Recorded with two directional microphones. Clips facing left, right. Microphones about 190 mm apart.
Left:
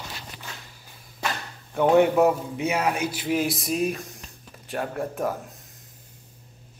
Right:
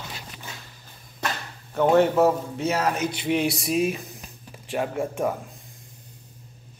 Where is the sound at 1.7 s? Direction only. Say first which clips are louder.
Even; 10° left (ahead or behind).